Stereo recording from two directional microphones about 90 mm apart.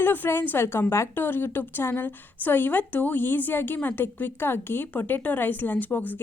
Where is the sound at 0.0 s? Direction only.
20° left (ahead or behind).